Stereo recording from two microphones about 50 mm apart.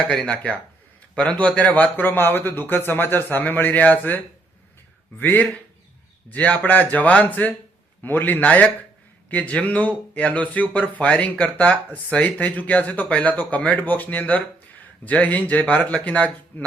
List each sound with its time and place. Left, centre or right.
0.1 s speech: centre
1.1 s a man's voice: left
5.2 s a man's voice: left